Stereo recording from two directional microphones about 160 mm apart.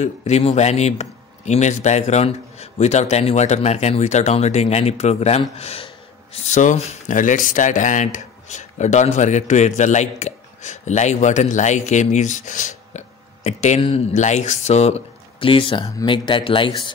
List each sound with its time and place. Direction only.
0.0 s speech: 40° left (ahead or behind)